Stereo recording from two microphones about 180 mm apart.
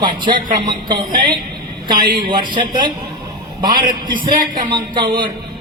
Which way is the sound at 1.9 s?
25° right (ahead or behind).